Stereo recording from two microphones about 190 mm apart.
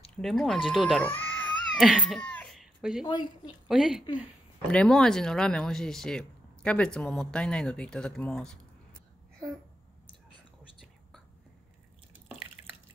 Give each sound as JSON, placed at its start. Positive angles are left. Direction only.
{"t": 0.2, "sound": "speech", "side_deg": 0}
{"t": 1.0, "sound": "a sound", "side_deg": 10}
{"t": 1.8, "sound": "cat", "side_deg": 0}
{"t": 3.1, "sound": "a woman's voice", "side_deg": 25}
{"t": 3.6, "sound": "speech", "side_deg": 0}